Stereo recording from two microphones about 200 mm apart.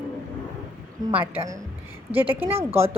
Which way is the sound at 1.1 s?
10° right (ahead or behind).